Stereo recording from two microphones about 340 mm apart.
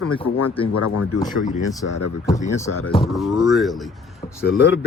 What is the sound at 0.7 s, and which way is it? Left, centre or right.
Speech, left.